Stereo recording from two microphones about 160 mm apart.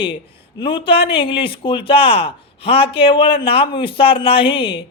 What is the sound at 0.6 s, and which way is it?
Speech, 30° left (ahead or behind).